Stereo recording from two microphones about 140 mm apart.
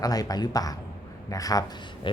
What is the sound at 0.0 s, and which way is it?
Speech, 25° left (ahead or behind).